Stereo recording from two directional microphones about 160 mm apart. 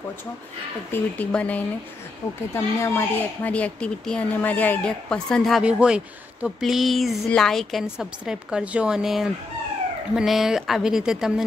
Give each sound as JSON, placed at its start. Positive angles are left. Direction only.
{"t": 0.9, "sound": "speech", "side_deg": 10}